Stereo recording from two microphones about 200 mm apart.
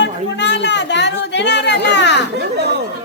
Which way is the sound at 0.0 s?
60° left (ahead or behind).